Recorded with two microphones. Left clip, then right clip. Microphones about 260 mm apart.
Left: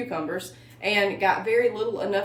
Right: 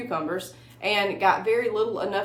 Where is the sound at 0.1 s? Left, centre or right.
Centre.